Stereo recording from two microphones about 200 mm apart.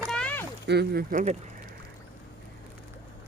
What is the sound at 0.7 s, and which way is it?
Speech, 55° right (ahead or behind).